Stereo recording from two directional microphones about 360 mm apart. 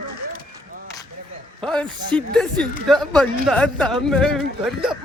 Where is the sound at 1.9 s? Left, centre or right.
Centre.